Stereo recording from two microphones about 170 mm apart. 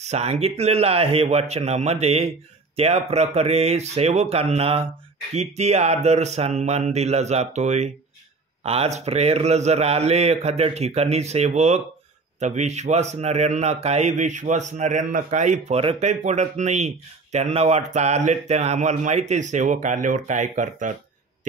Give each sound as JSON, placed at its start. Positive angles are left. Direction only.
{"t": 0.0, "sound": "speech", "side_deg": -40}